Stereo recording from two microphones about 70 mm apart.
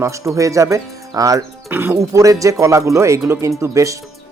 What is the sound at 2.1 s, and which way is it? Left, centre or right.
Speech, right.